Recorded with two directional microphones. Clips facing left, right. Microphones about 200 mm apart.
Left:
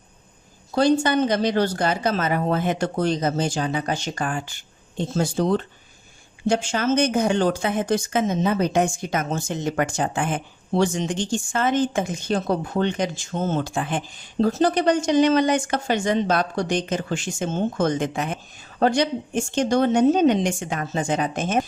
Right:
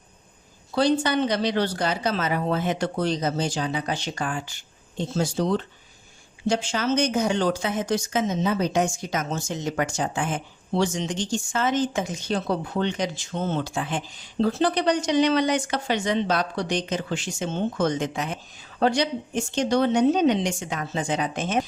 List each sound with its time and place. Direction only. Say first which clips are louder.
0.7 s speech: left 3 dB; 45° left (ahead or behind)